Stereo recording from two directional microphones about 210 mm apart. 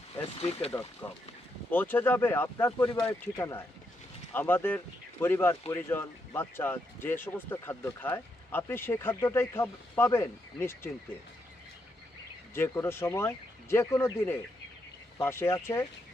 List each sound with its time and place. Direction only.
0.2 s speech: 30° left (ahead or behind)
1.0 s speech: 5° left (ahead or behind)
12.5 s speech: 10° left (ahead or behind)